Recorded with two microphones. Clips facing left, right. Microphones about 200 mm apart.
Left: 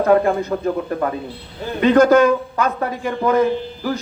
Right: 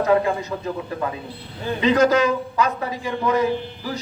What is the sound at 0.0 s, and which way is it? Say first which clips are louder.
Speech: left 4 dB; 50° left (ahead or behind).